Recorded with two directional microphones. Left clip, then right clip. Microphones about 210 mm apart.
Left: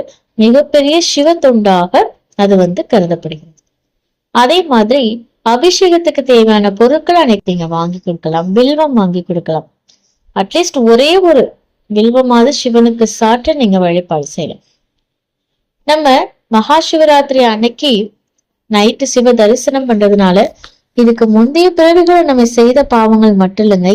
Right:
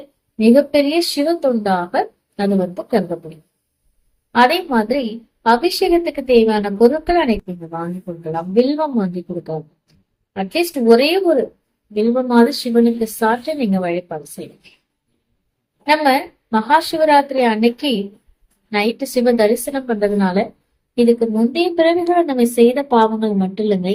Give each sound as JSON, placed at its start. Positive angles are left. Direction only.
{"t": 0.3, "sound": "speech", "side_deg": 35}
{"t": 4.4, "sound": "speech", "side_deg": 35}
{"t": 15.9, "sound": "speech", "side_deg": 35}
{"t": 21.5, "sound": "speech", "side_deg": 35}